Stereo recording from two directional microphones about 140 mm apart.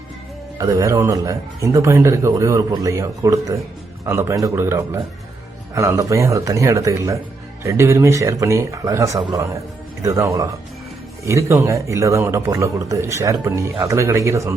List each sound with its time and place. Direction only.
0.6 s a man's voice: 25° right (ahead or behind)